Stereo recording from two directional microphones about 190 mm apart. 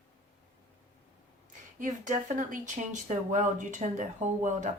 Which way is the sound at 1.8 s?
45° right (ahead or behind).